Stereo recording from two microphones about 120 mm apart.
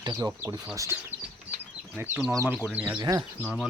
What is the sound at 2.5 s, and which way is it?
Speech, 10° right (ahead or behind).